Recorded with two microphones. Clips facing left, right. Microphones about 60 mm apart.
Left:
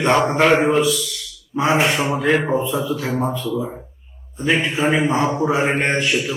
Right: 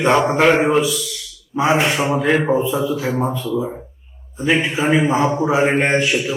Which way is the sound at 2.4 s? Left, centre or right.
Right.